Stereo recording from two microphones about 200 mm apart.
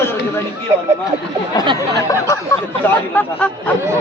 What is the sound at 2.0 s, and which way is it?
Speech, 15° left (ahead or behind).